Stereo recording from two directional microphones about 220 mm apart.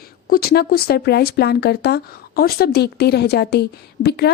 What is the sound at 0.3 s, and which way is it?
A woman's voice, 45° left (ahead or behind).